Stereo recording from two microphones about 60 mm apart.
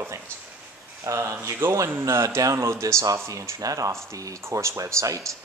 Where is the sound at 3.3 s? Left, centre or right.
Right.